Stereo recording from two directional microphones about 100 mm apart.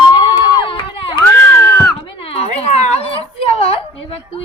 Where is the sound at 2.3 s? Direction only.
85° left.